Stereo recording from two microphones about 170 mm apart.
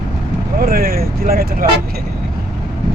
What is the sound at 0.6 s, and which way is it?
Speech, 60° right (ahead or behind).